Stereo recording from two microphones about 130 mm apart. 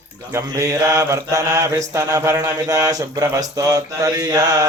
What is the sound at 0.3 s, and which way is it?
Mantra, 25° right (ahead or behind).